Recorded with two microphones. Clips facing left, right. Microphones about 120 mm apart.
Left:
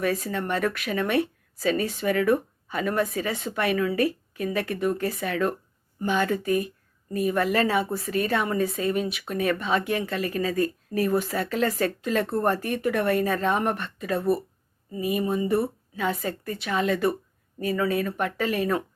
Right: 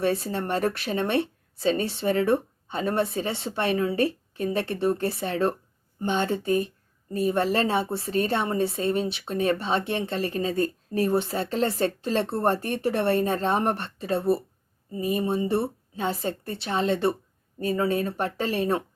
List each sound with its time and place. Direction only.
0.0 s speech: 30° right (ahead or behind)